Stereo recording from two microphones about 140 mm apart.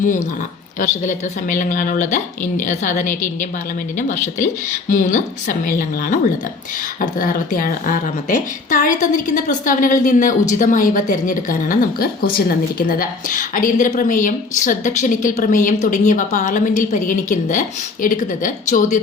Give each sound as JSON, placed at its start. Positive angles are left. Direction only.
{"t": 0.8, "sound": "a woman's voice", "side_deg": 65}